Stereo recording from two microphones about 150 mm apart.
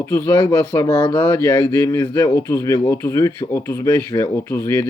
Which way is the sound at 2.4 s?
20° left (ahead or behind).